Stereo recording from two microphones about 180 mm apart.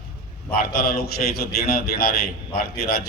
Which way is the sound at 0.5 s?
55° left (ahead or behind).